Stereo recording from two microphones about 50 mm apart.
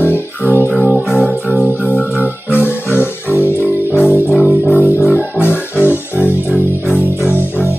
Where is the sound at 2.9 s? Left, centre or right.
Left.